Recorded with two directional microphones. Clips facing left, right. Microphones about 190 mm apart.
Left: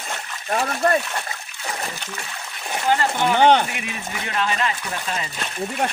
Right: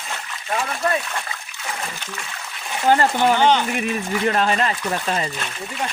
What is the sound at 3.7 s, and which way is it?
Speech, 45° right (ahead or behind).